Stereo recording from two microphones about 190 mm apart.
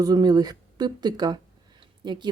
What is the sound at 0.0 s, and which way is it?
Speech, 20° right (ahead or behind).